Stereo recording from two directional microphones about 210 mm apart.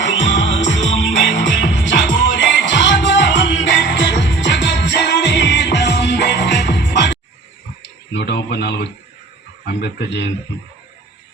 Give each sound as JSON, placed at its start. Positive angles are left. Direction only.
{"t": 0.0, "sound": "music", "side_deg": 60}
{"t": 8.1, "sound": "a sound", "side_deg": 55}
{"t": 9.6, "sound": "a man's voice", "side_deg": 50}